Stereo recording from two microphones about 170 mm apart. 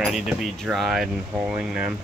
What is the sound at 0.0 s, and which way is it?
Speech, 5° right (ahead or behind).